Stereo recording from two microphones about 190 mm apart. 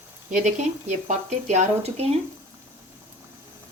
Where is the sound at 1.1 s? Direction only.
40° right (ahead or behind).